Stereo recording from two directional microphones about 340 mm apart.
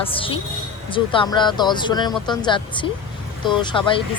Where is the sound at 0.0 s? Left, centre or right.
Centre.